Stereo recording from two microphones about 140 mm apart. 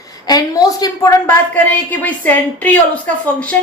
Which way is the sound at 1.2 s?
10° left (ahead or behind).